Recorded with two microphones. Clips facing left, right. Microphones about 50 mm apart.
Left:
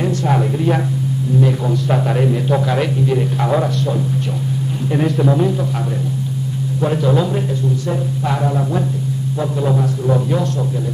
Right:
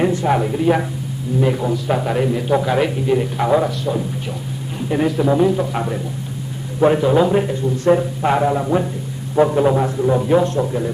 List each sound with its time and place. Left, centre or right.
0.0 s speech: centre
0.3 s a man's voice: centre
6.8 s speech: right
7.8 s speech: right
9.4 s speech: right
10.0 s speech: centre
10.3 s speech: right